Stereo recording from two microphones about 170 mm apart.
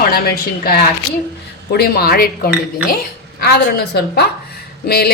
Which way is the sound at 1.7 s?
70° left (ahead or behind).